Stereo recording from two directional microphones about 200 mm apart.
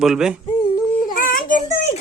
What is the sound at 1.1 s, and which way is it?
Child singing, 45° left (ahead or behind).